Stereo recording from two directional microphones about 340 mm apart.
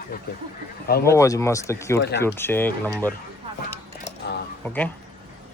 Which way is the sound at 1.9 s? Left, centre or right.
Left.